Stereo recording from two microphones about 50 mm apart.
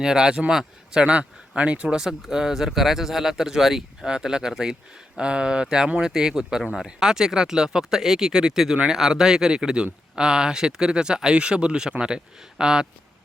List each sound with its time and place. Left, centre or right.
0.0 s speech: centre
2.0 s speech: centre